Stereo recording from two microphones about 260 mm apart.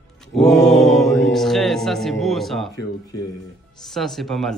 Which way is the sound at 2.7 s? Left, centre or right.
Centre.